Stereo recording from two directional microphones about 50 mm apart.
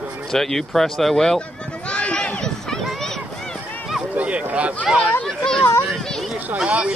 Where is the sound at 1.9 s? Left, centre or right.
Left.